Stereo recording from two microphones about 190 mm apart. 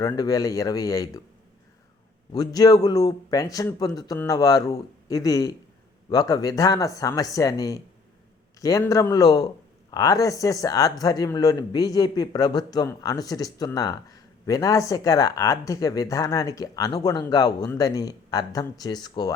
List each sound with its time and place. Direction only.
0.0 s speech: 20° left (ahead or behind)
2.3 s a man's voice: 20° left (ahead or behind)